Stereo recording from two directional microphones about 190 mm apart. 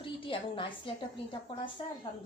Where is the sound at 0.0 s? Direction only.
25° left (ahead or behind).